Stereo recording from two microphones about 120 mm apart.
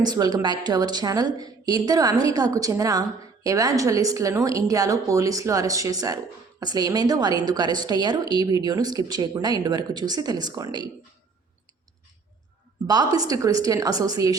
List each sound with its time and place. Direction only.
0.0 s a woman's voice: 35° right (ahead or behind)
12.9 s a woman's voice: 30° right (ahead or behind)